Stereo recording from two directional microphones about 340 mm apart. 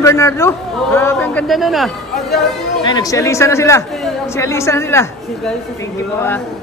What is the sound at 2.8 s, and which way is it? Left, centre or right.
A man's voice, centre.